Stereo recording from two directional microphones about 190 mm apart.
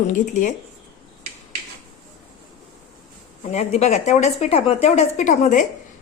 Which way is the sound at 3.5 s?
35° left (ahead or behind).